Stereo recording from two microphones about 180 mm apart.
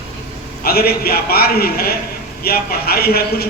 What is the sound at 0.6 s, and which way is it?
A man's voice, 60° left (ahead or behind).